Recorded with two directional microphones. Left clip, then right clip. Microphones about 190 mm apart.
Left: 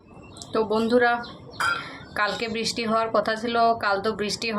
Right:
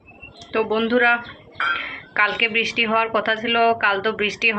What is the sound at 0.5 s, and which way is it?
Speech, 25° left (ahead or behind).